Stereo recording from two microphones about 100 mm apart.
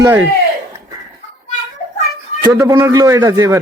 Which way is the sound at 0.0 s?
35° right (ahead or behind).